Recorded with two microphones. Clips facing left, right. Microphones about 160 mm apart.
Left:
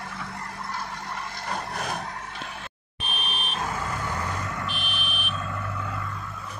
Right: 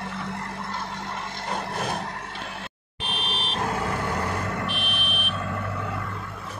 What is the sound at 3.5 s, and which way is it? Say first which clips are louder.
Vehicle: right 4 dB; 60° right (ahead or behind).